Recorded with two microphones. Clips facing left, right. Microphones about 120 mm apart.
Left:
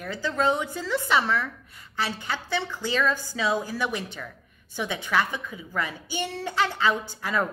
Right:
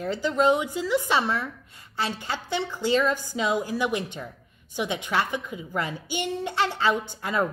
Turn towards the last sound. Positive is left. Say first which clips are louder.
# right 1 dB
turn(degrees=-20)  # may be behind; listen again after turning